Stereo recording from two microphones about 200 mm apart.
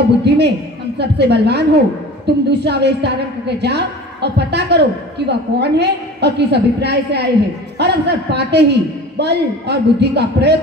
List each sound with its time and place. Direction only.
0.2 s a woman's voice: 55° right (ahead or behind)